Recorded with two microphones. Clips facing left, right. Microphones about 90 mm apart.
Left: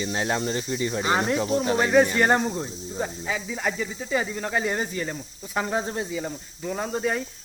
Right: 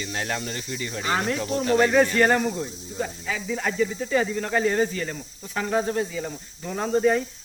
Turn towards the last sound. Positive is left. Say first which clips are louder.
# right 5 dB
turn(degrees=5)  # may be behind; listen again after turning